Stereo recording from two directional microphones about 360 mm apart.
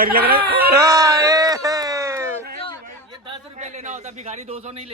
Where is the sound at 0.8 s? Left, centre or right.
Centre.